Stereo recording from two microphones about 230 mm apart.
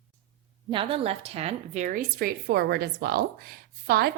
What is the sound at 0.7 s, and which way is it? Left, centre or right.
A woman's voice, right.